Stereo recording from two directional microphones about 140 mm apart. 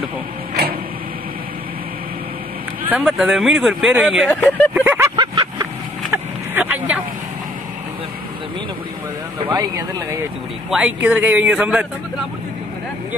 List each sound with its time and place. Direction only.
3.0 s speech: centre (ahead or behind)
4.3 s speech: 10° left (ahead or behind)
4.7 s a sound: 15° right (ahead or behind)
5.1 s vehicle: 35° right (ahead or behind)
6.1 s vehicle: 10° right (ahead or behind)
9.4 s speech: 30° right (ahead or behind)
10.7 s a man's voice: 5° right (ahead or behind)